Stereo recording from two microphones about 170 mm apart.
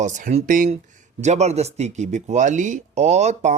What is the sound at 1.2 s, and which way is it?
Speech, 40° right (ahead or behind).